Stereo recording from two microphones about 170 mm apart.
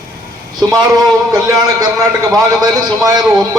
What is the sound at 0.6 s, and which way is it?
Speech, 25° right (ahead or behind).